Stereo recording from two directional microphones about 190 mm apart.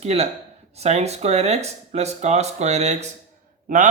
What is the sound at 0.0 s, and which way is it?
Speech, 35° right (ahead or behind).